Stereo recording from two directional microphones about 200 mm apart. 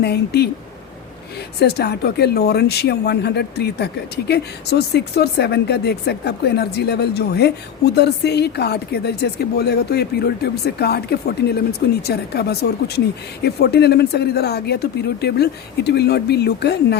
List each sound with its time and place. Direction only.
0.0 s speech: 55° left (ahead or behind)
1.5 s speech: 55° left (ahead or behind)